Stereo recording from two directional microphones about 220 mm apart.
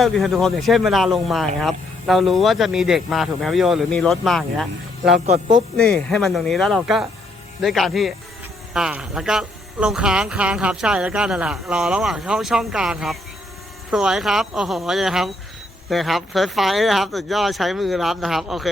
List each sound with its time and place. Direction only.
0.0 s speech: centre (ahead or behind)
5.2 s a man's voice: 25° right (ahead or behind)
5.7 s speech: centre (ahead or behind)